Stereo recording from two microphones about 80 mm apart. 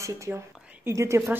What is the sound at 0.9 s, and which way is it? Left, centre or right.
Speech, right.